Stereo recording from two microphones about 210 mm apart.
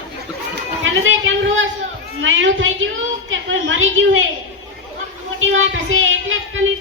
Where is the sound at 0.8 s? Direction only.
70° right (ahead or behind).